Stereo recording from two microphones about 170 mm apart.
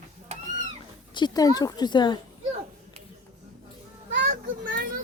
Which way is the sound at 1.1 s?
25° left (ahead or behind).